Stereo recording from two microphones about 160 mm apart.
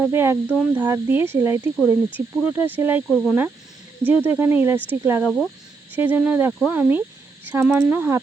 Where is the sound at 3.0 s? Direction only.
5° left (ahead or behind).